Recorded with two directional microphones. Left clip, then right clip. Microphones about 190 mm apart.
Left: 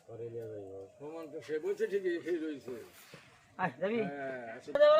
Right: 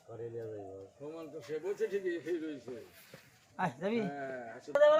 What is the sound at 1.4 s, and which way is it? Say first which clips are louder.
A man's voice: left 2 dB; 50° left (ahead or behind).